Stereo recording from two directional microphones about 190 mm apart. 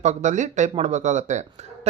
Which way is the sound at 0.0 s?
40° right (ahead or behind).